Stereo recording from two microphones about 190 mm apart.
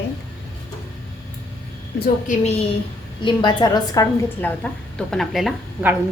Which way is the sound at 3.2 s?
25° left (ahead or behind).